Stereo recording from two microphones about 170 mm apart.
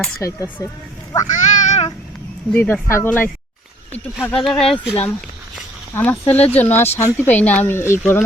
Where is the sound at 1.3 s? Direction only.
45° left (ahead or behind).